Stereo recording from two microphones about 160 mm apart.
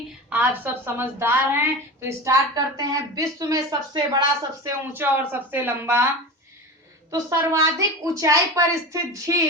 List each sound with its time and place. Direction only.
0.3 s a woman's voice: 10° right (ahead or behind)
4.6 s speech: 10° right (ahead or behind)
7.1 s a woman's voice: 20° right (ahead or behind)